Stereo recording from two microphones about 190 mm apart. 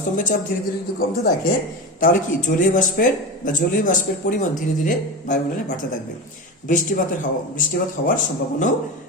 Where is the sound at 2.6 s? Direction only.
45° left (ahead or behind).